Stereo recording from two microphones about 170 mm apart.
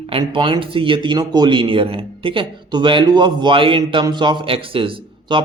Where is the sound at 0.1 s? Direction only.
30° right (ahead or behind).